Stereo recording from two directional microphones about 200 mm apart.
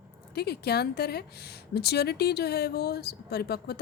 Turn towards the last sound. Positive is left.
turn(degrees=50)  # may be behind; listen again after turning